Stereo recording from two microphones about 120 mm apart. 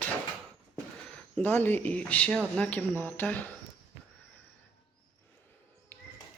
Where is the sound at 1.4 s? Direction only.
15° left (ahead or behind).